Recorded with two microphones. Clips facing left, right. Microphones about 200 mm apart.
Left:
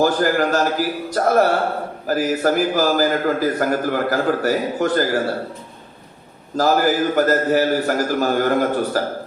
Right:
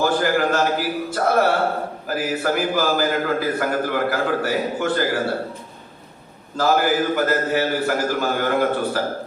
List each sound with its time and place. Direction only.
0.0 s a man's voice: 40° left (ahead or behind)
6.6 s a man's voice: 40° left (ahead or behind)